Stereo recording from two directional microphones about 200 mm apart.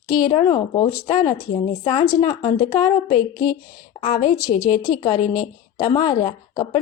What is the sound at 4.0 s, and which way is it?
Speech, 35° left (ahead or behind).